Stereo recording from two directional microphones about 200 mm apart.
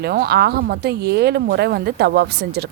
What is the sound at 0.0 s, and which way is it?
Speech, 50° right (ahead or behind).